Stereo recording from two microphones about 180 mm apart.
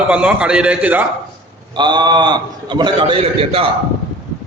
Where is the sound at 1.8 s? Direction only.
25° right (ahead or behind).